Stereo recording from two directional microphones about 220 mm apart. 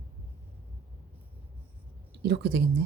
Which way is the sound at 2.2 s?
50° right (ahead or behind).